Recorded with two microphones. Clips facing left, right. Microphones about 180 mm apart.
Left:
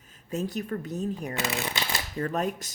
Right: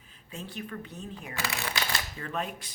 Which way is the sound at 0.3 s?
45° left (ahead or behind).